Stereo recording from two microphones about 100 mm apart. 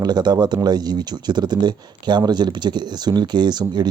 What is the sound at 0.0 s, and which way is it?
Speech, 45° right (ahead or behind).